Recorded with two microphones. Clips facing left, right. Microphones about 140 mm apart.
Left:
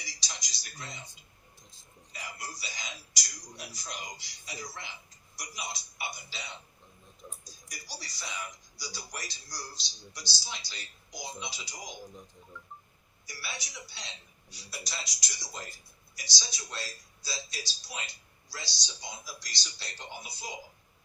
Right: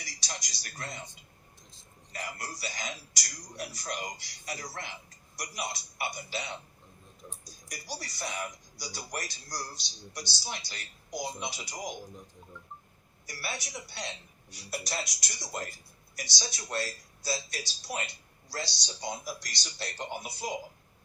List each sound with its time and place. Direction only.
0.0 s speech: 60° right (ahead or behind)
2.1 s speech: 60° right (ahead or behind)
13.2 s speech: 60° right (ahead or behind)